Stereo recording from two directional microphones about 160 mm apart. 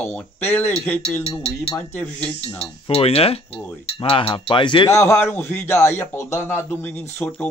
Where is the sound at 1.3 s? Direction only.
40° left (ahead or behind).